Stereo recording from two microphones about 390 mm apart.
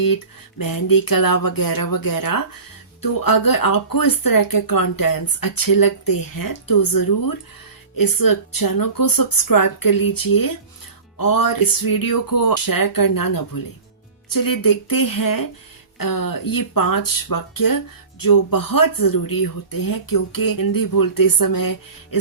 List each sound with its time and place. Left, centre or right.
0.6 s speech: left